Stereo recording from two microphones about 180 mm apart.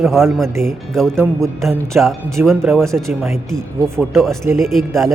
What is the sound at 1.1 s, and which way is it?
Speech, 15° right (ahead or behind).